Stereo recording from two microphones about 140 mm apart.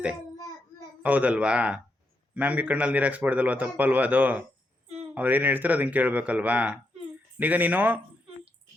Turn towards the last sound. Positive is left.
turn(degrees=-10)  # may be behind; listen again after turning